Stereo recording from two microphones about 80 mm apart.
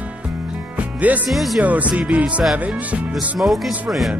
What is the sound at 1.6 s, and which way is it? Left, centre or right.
Speech, centre.